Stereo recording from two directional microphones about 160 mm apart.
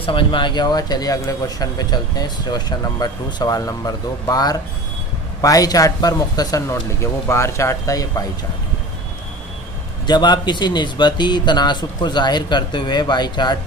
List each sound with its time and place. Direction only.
0.0 s speech: 30° left (ahead or behind)
10.0 s speech: 25° left (ahead or behind)